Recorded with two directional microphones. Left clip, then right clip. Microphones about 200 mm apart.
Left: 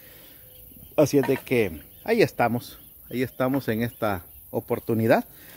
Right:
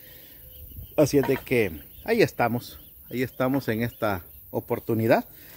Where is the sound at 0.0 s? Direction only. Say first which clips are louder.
Left 1 dB; 20° left (ahead or behind).